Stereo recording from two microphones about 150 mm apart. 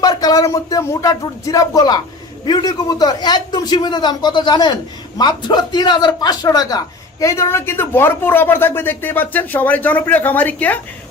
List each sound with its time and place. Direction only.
0.0 s a man's voice: 25° left (ahead or behind)